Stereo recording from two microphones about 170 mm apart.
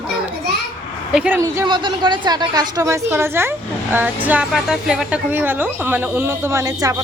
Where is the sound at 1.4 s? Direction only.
20° right (ahead or behind).